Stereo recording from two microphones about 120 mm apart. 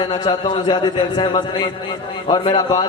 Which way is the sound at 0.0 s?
45° left (ahead or behind).